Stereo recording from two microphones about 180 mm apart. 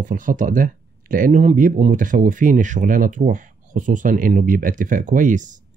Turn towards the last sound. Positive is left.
turn(degrees=-45)  # may be behind; listen again after turning